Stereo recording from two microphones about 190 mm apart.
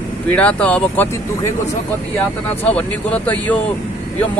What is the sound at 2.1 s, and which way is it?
Speech, 5° left (ahead or behind).